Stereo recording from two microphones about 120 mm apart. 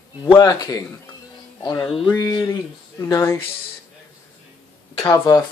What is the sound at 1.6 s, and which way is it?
Music, 30° left (ahead or behind).